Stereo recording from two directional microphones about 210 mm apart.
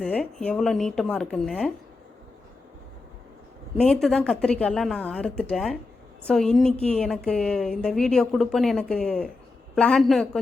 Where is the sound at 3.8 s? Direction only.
Centre (ahead or behind).